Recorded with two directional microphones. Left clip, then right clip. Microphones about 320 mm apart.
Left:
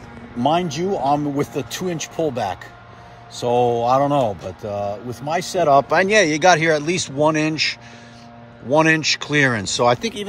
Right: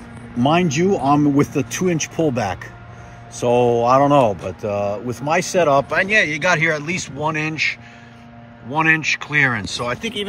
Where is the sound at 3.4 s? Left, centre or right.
Centre.